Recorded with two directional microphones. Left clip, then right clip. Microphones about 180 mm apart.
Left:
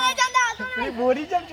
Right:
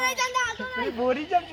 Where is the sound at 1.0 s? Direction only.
15° right (ahead or behind).